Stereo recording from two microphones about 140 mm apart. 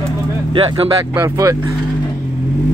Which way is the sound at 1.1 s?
25° right (ahead or behind).